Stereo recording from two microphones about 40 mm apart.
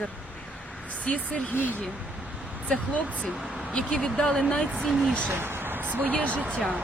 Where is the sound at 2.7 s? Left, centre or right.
Left.